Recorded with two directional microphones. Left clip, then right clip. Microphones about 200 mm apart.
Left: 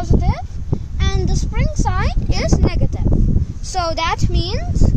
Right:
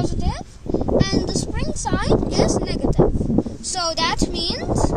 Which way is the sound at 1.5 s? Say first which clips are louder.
Left 2 dB; 25° left (ahead or behind).